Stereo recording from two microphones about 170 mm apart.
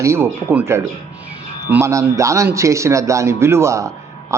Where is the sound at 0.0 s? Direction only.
15° right (ahead or behind).